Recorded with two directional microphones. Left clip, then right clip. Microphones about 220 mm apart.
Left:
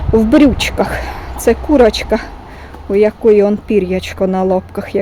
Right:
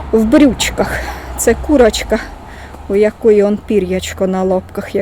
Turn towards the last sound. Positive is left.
turn(degrees=10)  # may be behind; listen again after turning